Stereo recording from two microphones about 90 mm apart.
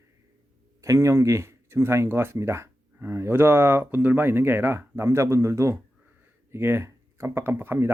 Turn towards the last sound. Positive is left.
turn(degrees=-25)  # may be behind; listen again after turning